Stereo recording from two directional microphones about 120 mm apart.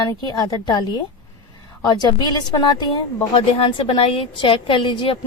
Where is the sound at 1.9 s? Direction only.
35° left (ahead or behind).